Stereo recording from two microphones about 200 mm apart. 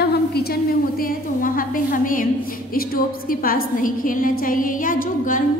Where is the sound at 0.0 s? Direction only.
50° left (ahead or behind).